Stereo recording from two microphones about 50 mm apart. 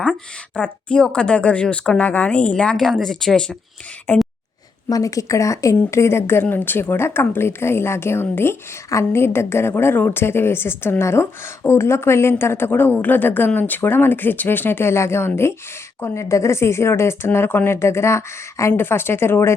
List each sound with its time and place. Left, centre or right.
0.5 s speech: left
2.7 s speech: centre
4.1 s a woman's voice: left
5.0 s speech: left
5.9 s a woman's voice: left
8.9 s a woman's voice: left
16.3 s a woman's voice: left
17.7 s speech: left
18.8 s a woman's voice: left